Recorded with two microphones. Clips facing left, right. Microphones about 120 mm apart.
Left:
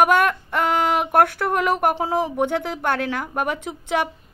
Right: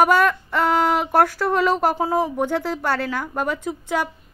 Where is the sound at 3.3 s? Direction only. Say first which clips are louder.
Right 1 dB; 65° left (ahead or behind).